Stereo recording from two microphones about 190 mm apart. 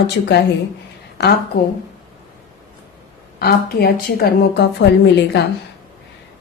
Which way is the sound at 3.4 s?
55° left (ahead or behind).